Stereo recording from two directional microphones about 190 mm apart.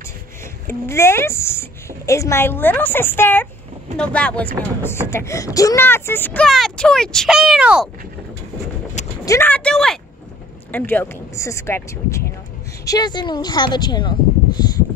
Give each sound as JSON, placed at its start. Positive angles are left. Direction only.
{"t": 0.7, "sound": "speech", "side_deg": 15}
{"t": 9.2, "sound": "speech", "side_deg": 15}